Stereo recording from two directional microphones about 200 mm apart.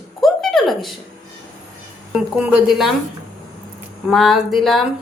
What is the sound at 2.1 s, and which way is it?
Speech, 5° right (ahead or behind).